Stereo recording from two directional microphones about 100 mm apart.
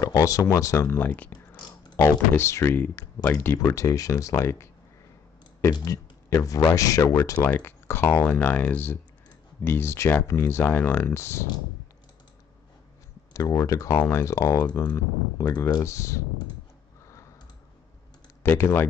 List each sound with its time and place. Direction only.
0.0 s speech: 35° left (ahead or behind); by 3.5 s 20° left (ahead or behind)
3.5 s speech: 35° left (ahead or behind)
5.7 s speech: 45° left (ahead or behind)
6.3 s speech: 30° left (ahead or behind)
7.3 s speech: 20° left (ahead or behind)
13.3 s speech: 30° left (ahead or behind)
13.9 s speech: 20° left (ahead or behind)
14.2 s speech: 30° left (ahead or behind)
17.0 s tick-tock: 30° left (ahead or behind)
18.4 s speech: 20° left (ahead or behind)